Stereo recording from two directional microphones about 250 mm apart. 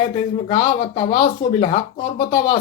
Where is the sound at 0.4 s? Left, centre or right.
Centre.